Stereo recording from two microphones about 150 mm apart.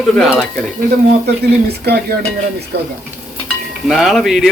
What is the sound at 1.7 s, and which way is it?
Dishes, 90° right.